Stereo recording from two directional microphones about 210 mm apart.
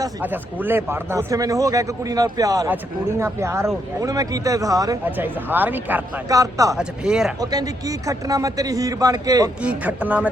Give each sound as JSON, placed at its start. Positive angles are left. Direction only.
{"t": 0.0, "sound": "speech", "side_deg": -10}
{"t": 6.7, "sound": "speech", "side_deg": -5}
{"t": 7.5, "sound": "speech", "side_deg": -15}
{"t": 9.6, "sound": "speech", "side_deg": -5}